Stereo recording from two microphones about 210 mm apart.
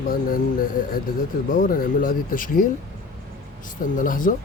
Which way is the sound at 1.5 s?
40° left (ahead or behind).